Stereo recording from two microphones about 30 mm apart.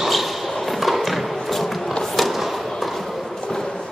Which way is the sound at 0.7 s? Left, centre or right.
Centre.